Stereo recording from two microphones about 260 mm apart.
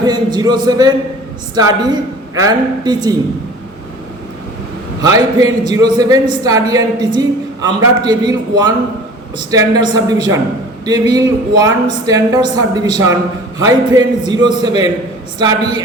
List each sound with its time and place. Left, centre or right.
0.0 s a woman's voice: centre
5.0 s a woman's voice: centre